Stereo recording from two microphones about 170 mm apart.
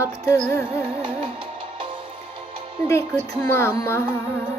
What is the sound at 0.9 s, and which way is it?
Music, 30° right (ahead or behind).